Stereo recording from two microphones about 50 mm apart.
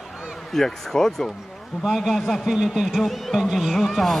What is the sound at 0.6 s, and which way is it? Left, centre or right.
Speech, centre.